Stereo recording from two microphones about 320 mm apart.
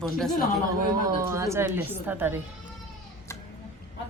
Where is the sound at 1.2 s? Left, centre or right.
Centre.